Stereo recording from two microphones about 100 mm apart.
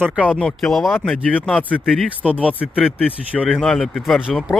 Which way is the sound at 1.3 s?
15° left (ahead or behind).